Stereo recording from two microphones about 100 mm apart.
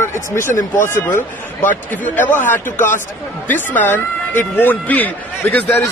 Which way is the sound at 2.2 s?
20° left (ahead or behind).